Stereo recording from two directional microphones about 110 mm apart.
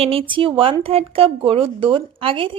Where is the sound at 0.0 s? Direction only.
55° right (ahead or behind).